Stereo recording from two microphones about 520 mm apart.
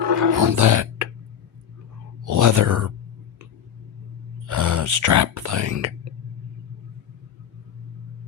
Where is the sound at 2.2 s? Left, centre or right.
Right.